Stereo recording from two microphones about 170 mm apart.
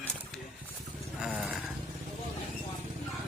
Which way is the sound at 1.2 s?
5° right (ahead or behind).